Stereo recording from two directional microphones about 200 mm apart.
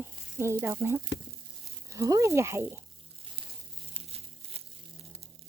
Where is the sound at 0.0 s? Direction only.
10° right (ahead or behind).